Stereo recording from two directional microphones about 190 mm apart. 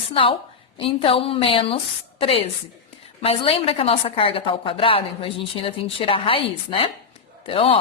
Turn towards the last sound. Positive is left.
turn(degrees=30)  # may be behind; listen again after turning